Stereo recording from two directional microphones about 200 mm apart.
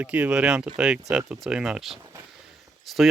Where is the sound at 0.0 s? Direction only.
5° right (ahead or behind).